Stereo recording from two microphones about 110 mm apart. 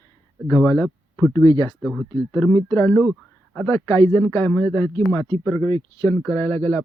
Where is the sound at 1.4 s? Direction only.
40° left (ahead or behind).